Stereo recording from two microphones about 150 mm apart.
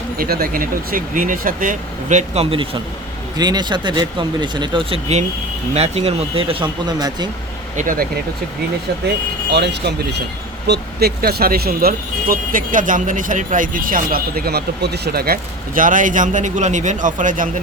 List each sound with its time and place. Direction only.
0.2 s speech: 80° right; by 2.6 s 40° right (ahead or behind)
3.3 s speech: 25° right (ahead or behind)
7.8 s speech: 65° right (ahead or behind)
9.8 s speech: 90° right; by 17.5 s 60° right (ahead or behind)